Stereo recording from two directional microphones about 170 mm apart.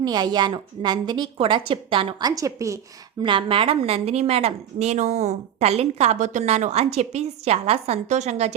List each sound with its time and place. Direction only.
0.0 s a woman's voice: 25° right (ahead or behind)
3.2 s a woman's voice: 30° right (ahead or behind)